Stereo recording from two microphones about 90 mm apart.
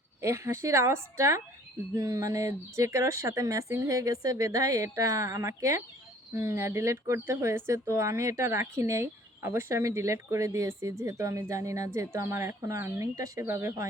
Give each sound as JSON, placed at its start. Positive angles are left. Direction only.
{"t": 0.2, "sound": "speech", "side_deg": -30}